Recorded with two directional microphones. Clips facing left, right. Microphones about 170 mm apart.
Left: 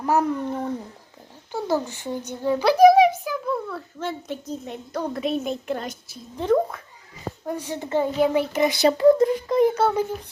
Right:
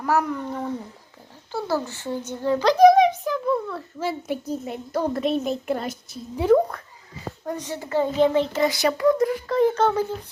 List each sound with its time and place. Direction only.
0.0 s a child's voice: 20° left (ahead or behind); by 6.6 s 5° right (ahead or behind)
7.4 s a child's voice: 10° left (ahead or behind)
8.8 s a child's voice: 30° left (ahead or behind)